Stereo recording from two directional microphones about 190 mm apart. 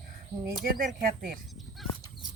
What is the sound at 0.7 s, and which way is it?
Speech, 50° right (ahead or behind).